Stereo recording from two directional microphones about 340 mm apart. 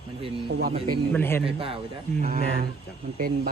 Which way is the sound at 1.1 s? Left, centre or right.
Centre.